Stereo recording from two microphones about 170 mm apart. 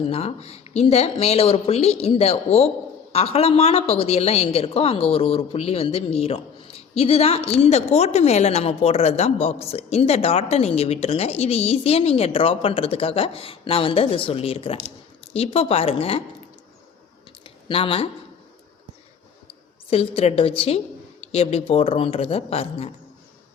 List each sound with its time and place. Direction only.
0.1 s a woman's voice: 35° left (ahead or behind)
17.4 s typing: 30° left (ahead or behind)
19.9 s a woman's voice: 35° left (ahead or behind)